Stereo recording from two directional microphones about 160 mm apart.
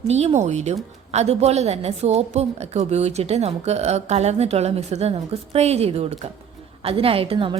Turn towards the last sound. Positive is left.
turn(degrees=-35)  # may be behind; listen again after turning